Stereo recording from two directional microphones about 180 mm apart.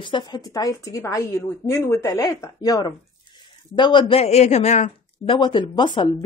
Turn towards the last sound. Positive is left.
turn(degrees=25)  # may be behind; listen again after turning